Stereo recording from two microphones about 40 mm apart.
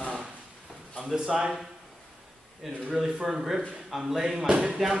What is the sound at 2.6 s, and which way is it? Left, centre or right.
A man's voice, centre.